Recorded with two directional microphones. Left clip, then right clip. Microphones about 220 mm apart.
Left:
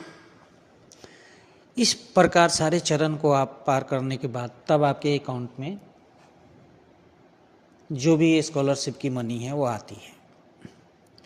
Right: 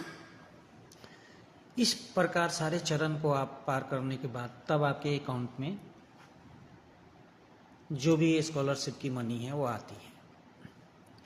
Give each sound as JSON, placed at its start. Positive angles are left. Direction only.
{"t": 1.7, "sound": "a man's voice", "side_deg": 40}
{"t": 5.3, "sound": "speech", "side_deg": 20}
{"t": 7.9, "sound": "a man's voice", "side_deg": 30}